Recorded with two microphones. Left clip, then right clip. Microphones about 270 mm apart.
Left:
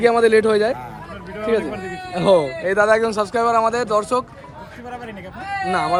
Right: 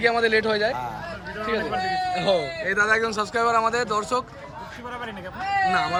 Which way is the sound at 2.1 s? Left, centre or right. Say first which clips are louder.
Left 12 dB; centre.